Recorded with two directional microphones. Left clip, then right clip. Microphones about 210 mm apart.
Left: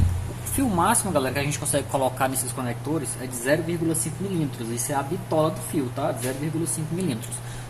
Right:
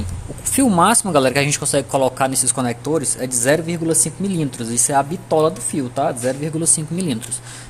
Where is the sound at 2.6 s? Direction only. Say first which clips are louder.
Right 8 dB; 55° right (ahead or behind).